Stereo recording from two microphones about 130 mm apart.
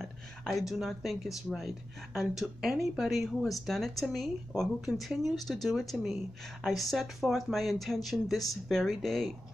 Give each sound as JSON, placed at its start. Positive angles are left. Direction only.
{"t": 0.0, "sound": "speech", "side_deg": 0}